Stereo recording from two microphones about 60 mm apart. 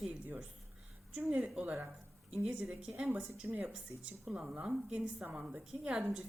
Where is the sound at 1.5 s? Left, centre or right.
Right.